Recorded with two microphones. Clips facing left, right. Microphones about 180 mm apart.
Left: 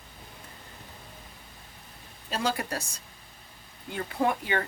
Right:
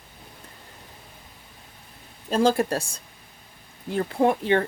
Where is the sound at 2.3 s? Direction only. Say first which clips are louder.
Right 9 dB; 50° right (ahead or behind).